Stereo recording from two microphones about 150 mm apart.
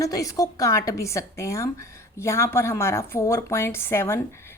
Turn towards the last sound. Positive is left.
turn(degrees=15)  # may be behind; listen again after turning